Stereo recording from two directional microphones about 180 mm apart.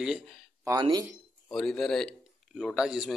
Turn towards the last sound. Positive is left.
turn(degrees=-5)  # may be behind; listen again after turning